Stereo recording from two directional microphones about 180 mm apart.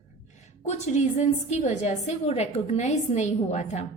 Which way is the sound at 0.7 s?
40° left (ahead or behind).